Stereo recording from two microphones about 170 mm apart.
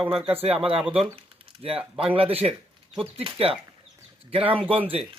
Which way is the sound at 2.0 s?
35° right (ahead or behind).